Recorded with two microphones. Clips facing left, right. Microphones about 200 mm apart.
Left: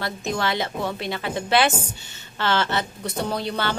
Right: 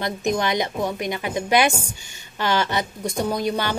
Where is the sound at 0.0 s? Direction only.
15° right (ahead or behind).